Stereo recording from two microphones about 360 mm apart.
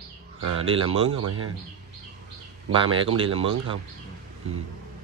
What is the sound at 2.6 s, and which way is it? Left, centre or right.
Speech, centre.